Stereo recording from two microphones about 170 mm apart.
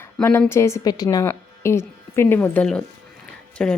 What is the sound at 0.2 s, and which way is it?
Speech, 15° left (ahead or behind).